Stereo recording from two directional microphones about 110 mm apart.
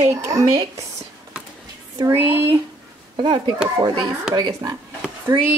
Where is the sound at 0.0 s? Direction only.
30° right (ahead or behind).